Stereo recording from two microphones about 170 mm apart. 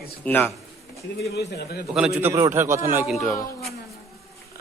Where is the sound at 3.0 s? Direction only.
Centre (ahead or behind).